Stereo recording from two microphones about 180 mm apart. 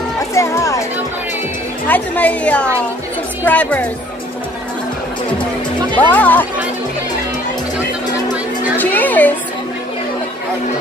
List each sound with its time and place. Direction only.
0.3 s speech: 15° left (ahead or behind)
1.9 s a woman's voice: 10° left (ahead or behind)
5.9 s a woman's voice: 10° left (ahead or behind)
8.7 s a woman's voice: 10° left (ahead or behind)